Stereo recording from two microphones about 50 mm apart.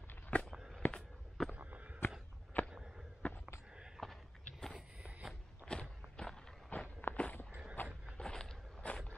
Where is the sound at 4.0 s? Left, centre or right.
Centre.